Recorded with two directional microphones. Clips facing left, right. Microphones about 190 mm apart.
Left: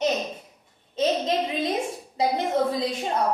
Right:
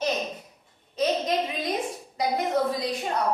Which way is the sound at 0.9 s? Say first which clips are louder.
Left 1 dB; 25° left (ahead or behind).